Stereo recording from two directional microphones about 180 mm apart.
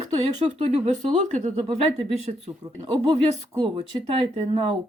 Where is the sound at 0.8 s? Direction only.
40° right (ahead or behind).